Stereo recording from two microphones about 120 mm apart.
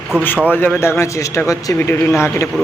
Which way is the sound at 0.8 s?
25° left (ahead or behind).